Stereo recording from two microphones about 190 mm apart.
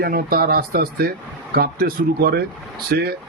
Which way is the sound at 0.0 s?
50° right (ahead or behind).